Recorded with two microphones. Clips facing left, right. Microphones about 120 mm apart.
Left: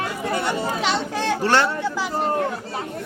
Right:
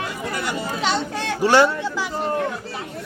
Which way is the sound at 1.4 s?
10° right (ahead or behind).